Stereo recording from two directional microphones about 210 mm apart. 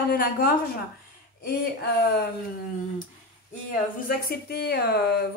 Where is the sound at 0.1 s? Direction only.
45° left (ahead or behind).